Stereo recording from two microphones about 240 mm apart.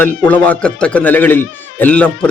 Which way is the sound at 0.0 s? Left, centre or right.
Centre.